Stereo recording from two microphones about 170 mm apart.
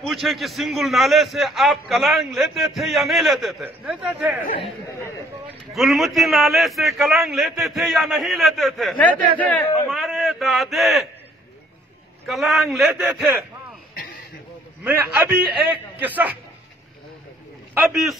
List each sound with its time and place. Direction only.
0.0 s a man's voice: centre (ahead or behind)
5.7 s a man's voice: centre (ahead or behind)
12.3 s a man's voice: centre (ahead or behind)
16.0 s a man's voice: 10° right (ahead or behind)
17.7 s a man's voice: centre (ahead or behind)